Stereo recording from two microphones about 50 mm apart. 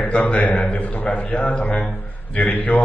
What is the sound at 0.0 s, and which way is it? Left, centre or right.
A man's voice, left.